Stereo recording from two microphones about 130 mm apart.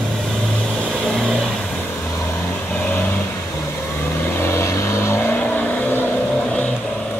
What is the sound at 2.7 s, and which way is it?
Vehicle, 10° left (ahead or behind).